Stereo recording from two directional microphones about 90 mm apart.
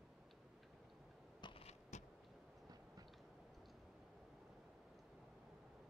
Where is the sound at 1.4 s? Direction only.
60° left (ahead or behind).